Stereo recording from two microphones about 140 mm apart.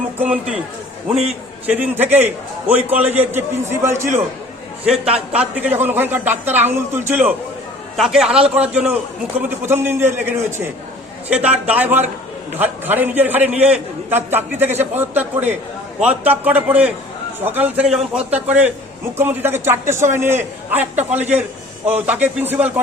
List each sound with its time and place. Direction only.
0.2 s a man's voice: 10° right (ahead or behind)
1.6 s a man's voice: 10° right (ahead or behind)
4.9 s a man's voice: 5° right (ahead or behind)
7.9 s a man's voice: centre (ahead or behind)
11.6 s a man's voice: 10° right (ahead or behind)